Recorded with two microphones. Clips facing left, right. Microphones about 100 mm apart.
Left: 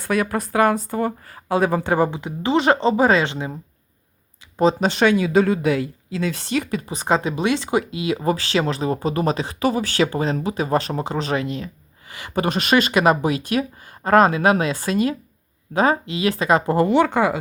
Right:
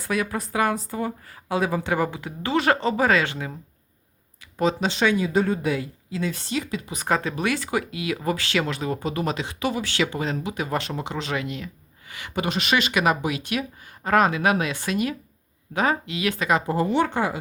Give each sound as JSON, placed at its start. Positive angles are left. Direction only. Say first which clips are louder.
{"t": 0.0, "sound": "speech", "louder": "left 4 dB", "side_deg": 55}
{"t": 1.9, "sound": "speech", "louder": "left 5 dB", "side_deg": 30}
{"t": 4.8, "sound": "a woman's voice", "louder": "left 4 dB", "side_deg": 55}
{"t": 6.8, "sound": "speech", "louder": "left 4 dB", "side_deg": 30}
{"t": 16.6, "sound": "a woman's voice", "louder": "left 5 dB", "side_deg": 65}